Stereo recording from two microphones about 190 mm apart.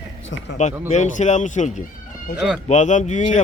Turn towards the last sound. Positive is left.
turn(degrees=40)  # may be behind; listen again after turning